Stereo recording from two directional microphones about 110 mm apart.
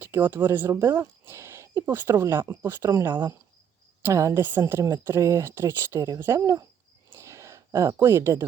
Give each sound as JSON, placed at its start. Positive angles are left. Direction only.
{"t": 0.0, "sound": "speech", "side_deg": -15}
{"t": 7.1, "sound": "a sound", "side_deg": -25}
{"t": 7.9, "sound": "speech", "side_deg": -20}